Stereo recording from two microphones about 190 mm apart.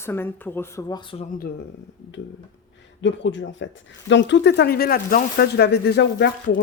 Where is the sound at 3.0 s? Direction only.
75° left (ahead or behind).